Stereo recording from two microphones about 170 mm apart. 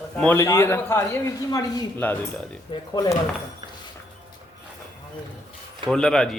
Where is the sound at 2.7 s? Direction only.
20° left (ahead or behind).